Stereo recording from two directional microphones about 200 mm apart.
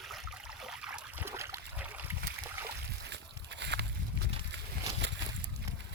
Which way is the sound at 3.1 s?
60° right (ahead or behind).